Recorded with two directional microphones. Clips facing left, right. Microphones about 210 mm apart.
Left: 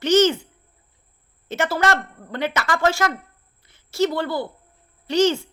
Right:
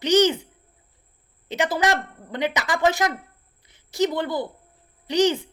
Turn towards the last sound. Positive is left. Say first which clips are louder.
# left 1 dB
turn(degrees=-15)  # may be behind; listen again after turning